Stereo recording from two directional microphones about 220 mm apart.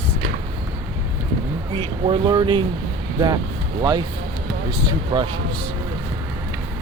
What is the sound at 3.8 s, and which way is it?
Speech, 20° right (ahead or behind).